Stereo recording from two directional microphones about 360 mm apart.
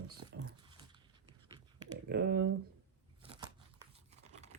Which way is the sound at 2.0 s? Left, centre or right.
Right.